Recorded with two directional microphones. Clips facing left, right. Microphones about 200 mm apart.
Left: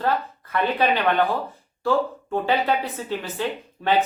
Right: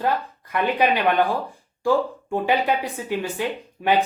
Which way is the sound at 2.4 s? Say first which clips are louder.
Right 1 dB; 15° right (ahead or behind).